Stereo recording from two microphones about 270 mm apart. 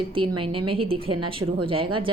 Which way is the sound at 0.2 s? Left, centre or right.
Centre.